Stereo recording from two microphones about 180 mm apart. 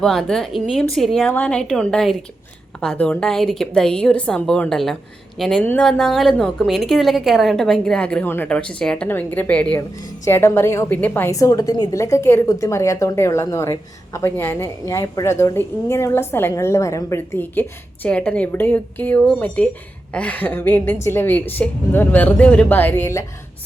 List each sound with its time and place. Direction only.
0.0 s a woman's voice: centre (ahead or behind)